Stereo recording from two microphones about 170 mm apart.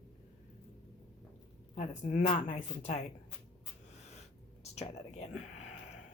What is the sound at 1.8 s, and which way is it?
Speech, 45° left (ahead or behind).